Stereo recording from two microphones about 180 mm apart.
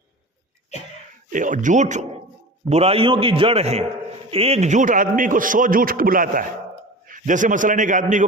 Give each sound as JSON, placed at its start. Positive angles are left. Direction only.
{"t": 1.3, "sound": "a man's voice", "side_deg": -45}